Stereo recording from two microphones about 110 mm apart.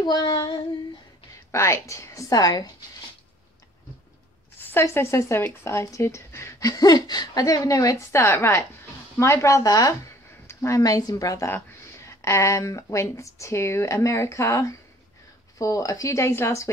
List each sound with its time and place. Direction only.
0.0 s female singing: 40° left (ahead or behind)
1.5 s speech: 25° left (ahead or behind)
4.6 s speech: 20° left (ahead or behind)